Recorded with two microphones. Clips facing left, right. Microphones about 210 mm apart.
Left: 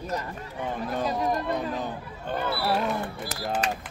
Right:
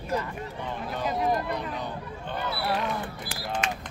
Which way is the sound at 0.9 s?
45° left (ahead or behind).